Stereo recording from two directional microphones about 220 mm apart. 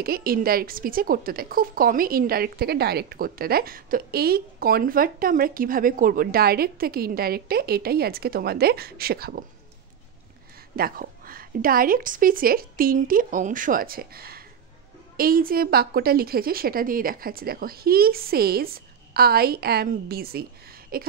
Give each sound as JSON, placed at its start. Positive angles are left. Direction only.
{"t": 0.0, "sound": "a woman's voice", "side_deg": -40}
{"t": 10.8, "sound": "a woman's voice", "side_deg": -40}